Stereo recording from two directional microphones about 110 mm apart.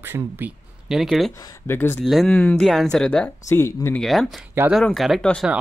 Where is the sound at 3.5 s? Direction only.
20° left (ahead or behind).